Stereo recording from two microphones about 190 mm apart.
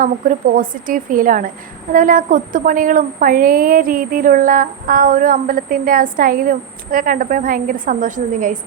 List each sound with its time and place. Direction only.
0.0 s a woman's voice: 45° right (ahead or behind)